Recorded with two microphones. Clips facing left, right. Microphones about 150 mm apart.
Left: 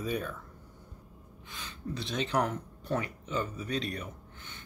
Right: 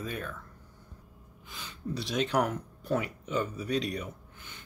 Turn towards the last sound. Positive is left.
turn(degrees=-10)  # may be behind; listen again after turning